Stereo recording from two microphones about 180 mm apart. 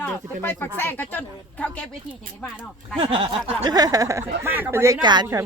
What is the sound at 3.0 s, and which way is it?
Speech, 30° right (ahead or behind).